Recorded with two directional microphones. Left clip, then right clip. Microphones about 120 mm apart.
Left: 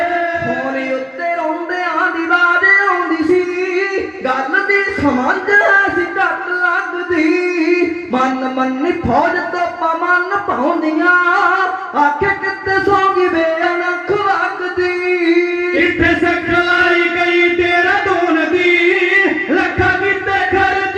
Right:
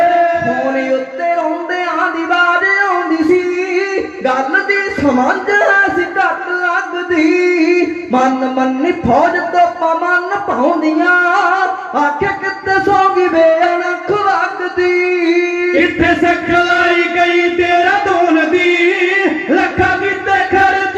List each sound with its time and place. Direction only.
2.0 s music: 40° right (ahead or behind)
4.5 s a sound: 40° right (ahead or behind)
7.8 s a man's voice: 40° right (ahead or behind)
12.7 s music: 40° right (ahead or behind)
14.8 s a sound: 40° right (ahead or behind)
19.1 s music: 35° right (ahead or behind)